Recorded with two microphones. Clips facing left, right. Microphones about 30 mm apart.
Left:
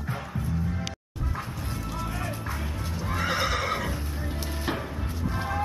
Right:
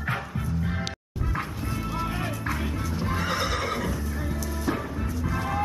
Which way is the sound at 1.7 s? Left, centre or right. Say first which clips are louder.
Right 4 dB; right.